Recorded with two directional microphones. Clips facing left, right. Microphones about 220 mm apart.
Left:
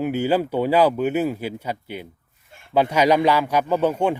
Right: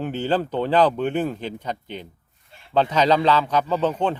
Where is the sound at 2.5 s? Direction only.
50° left (ahead or behind).